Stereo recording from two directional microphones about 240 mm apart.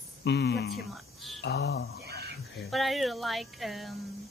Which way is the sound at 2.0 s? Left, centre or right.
Right.